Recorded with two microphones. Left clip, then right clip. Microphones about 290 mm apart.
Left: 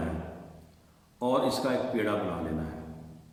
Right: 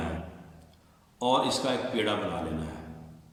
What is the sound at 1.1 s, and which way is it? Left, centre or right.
Mantra, centre.